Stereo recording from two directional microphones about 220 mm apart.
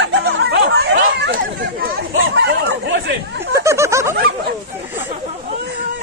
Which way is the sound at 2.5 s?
50° right (ahead or behind).